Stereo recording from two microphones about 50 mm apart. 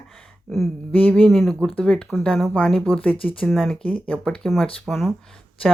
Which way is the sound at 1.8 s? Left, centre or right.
Centre.